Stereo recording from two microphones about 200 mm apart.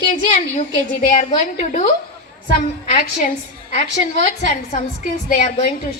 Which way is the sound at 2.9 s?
40° left (ahead or behind).